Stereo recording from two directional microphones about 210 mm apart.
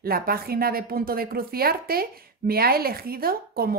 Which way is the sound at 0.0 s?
45° right (ahead or behind).